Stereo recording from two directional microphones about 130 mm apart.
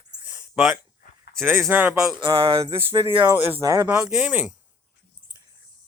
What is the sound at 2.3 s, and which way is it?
Speech, 20° right (ahead or behind).